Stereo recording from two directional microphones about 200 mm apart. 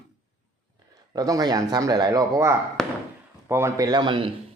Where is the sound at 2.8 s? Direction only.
Centre (ahead or behind).